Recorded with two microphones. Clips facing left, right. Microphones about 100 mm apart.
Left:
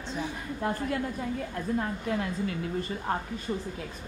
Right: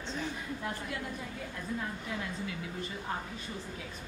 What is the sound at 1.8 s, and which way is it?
A woman's voice, 50° left (ahead or behind).